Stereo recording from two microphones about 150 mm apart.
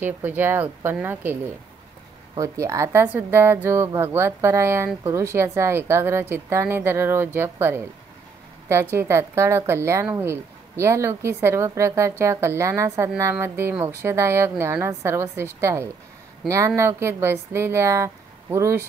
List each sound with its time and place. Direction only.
0.0 s a woman's voice: 10° right (ahead or behind)